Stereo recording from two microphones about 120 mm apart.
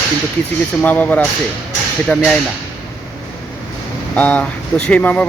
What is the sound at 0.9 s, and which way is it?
Speech, 15° left (ahead or behind).